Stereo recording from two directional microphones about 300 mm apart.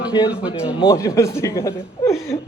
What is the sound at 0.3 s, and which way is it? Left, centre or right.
Speech, centre.